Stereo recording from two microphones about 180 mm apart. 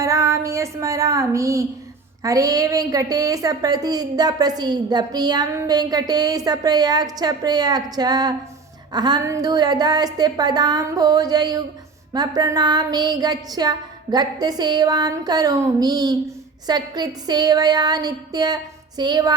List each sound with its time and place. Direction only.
0.0 s a woman's voice: 15° right (ahead or behind)